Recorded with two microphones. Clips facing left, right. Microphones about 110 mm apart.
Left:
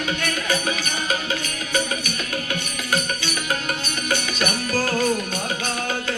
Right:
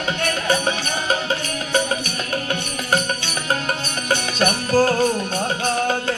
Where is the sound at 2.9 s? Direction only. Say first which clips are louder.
Right 3 dB; 35° right (ahead or behind).